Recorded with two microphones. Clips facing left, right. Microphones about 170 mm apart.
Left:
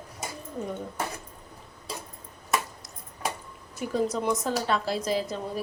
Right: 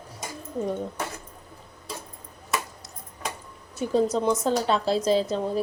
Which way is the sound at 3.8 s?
25° right (ahead or behind).